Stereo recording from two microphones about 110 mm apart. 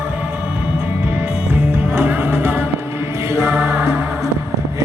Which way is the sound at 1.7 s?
15° right (ahead or behind).